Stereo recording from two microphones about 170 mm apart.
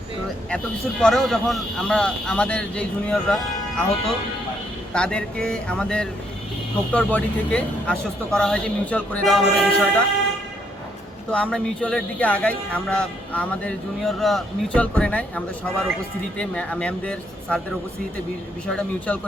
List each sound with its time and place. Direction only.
1.0 s speech: 5° left (ahead or behind)
11.3 s speech: 5° left (ahead or behind)
16.4 s speech: 5° left (ahead or behind)
18.7 s speech: 10° left (ahead or behind)